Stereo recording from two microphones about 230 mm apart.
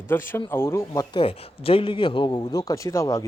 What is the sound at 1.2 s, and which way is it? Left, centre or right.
A man's voice, left.